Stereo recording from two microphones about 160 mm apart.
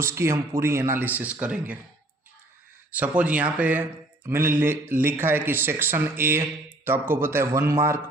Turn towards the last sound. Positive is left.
turn(degrees=-15)  # may be behind; listen again after turning